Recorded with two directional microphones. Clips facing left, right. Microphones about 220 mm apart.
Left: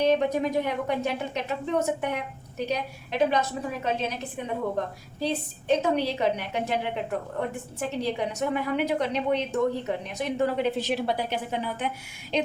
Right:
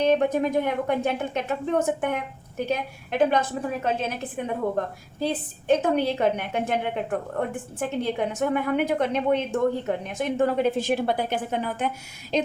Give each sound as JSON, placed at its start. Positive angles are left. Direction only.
{"t": 0.2, "sound": "a woman's voice", "side_deg": -50}
{"t": 5.2, "sound": "a woman's voice", "side_deg": -50}